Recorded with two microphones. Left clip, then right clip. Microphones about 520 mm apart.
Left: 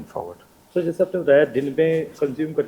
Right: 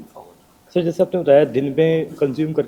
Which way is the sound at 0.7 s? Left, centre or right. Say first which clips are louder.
Right 3 dB; right.